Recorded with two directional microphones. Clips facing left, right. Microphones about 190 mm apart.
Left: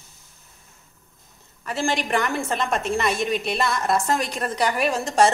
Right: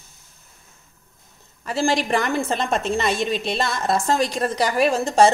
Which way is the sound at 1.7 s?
30° right (ahead or behind).